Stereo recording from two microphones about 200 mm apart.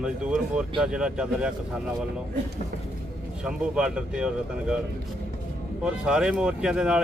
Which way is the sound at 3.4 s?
5° right (ahead or behind).